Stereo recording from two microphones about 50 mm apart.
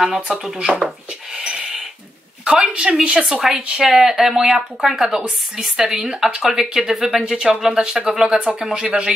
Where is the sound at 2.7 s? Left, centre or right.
Right.